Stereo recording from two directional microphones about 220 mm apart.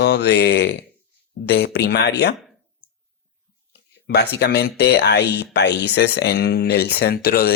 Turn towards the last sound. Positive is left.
turn(degrees=45)  # may be behind; listen again after turning